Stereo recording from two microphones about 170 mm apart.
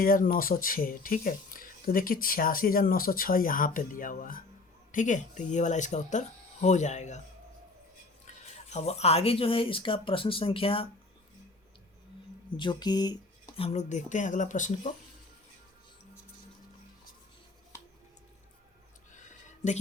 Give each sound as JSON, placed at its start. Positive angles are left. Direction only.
{"t": 0.0, "sound": "speech", "side_deg": 55}
{"t": 8.7, "sound": "speech", "side_deg": 40}
{"t": 12.5, "sound": "speech", "side_deg": 25}
{"t": 13.7, "sound": "speech", "side_deg": 45}